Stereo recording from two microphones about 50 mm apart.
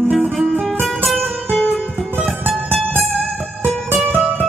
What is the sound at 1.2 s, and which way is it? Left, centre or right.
Music, left.